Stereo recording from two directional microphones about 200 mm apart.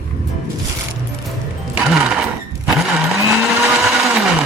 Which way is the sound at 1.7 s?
Centre (ahead or behind).